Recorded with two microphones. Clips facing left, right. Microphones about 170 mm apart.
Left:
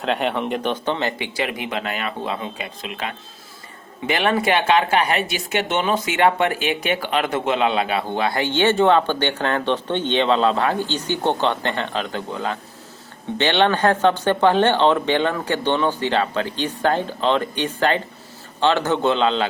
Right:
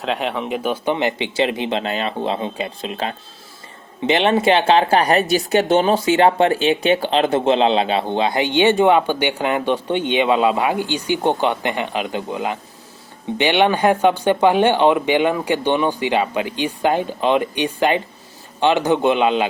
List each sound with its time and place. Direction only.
0.0 s speech: centre (ahead or behind)